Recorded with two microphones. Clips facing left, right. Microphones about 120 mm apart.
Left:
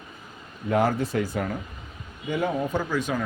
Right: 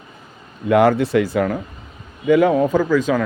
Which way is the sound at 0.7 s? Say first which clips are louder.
Right 9 dB; 85° right.